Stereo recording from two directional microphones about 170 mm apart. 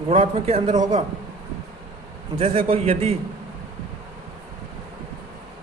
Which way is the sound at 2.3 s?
35° right (ahead or behind).